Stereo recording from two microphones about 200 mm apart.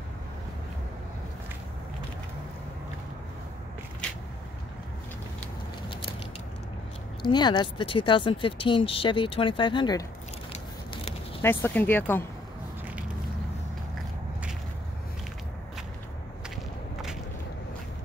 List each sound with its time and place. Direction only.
7.2 s speech: 20° left (ahead or behind)
11.4 s speech: 10° left (ahead or behind)